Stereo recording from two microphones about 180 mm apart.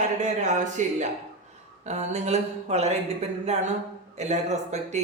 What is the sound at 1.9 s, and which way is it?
Speech, 40° right (ahead or behind).